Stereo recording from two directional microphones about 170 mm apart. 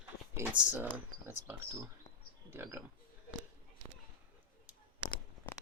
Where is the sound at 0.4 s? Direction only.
10° right (ahead or behind).